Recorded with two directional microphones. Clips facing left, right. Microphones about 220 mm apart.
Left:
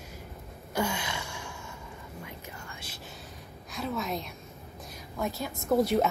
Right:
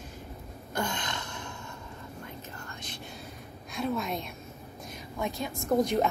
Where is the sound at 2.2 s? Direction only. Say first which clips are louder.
Right 1 dB; 10° left (ahead or behind).